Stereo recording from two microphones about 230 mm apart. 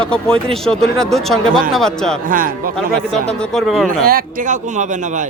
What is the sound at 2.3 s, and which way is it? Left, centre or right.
Speech, right.